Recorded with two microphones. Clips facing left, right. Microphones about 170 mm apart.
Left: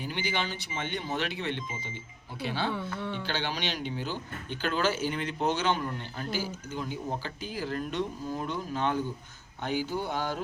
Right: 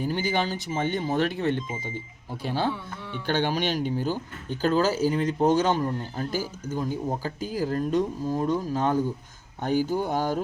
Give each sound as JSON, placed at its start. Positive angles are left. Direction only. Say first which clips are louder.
{"t": 0.0, "sound": "speech", "louder": "right 7 dB", "side_deg": -45}